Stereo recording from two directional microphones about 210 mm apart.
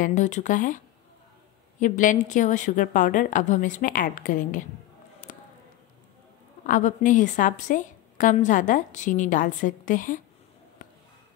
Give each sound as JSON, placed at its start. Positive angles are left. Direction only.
{"t": 0.0, "sound": "a woman's voice", "side_deg": 35}
{"t": 5.2, "sound": "a sound", "side_deg": 40}
{"t": 6.6, "sound": "a woman's voice", "side_deg": 40}